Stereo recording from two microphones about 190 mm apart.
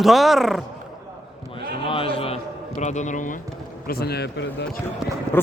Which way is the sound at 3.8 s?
55° left (ahead or behind).